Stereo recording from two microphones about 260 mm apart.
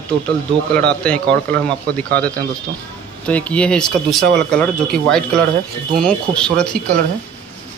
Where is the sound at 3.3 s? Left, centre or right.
Centre.